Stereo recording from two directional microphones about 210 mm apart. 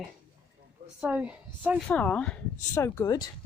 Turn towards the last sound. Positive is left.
turn(degrees=15)  # may be behind; listen again after turning